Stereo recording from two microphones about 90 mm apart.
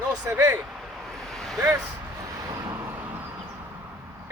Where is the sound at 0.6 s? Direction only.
Centre (ahead or behind).